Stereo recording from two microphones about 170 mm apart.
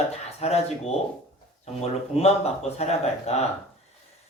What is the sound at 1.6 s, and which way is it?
A man's voice, 40° left (ahead or behind).